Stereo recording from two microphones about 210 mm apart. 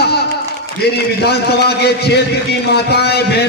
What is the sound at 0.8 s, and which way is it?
A man's voice, 50° left (ahead or behind).